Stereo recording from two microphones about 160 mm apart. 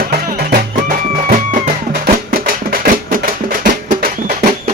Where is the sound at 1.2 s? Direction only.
55° right (ahead or behind).